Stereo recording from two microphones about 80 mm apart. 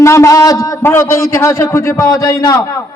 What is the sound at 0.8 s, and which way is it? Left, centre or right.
A man's voice, left.